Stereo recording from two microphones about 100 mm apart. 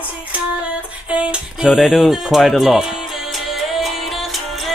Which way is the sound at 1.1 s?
5° right (ahead or behind).